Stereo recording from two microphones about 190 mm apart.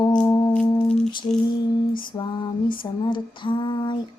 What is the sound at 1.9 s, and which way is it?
Female singing, 25° left (ahead or behind).